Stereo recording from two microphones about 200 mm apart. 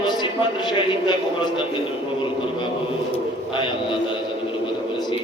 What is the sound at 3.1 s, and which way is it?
Speech, 25° left (ahead or behind).